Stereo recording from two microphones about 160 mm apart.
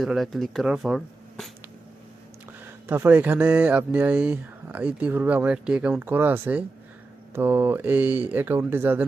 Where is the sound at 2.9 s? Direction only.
10° right (ahead or behind).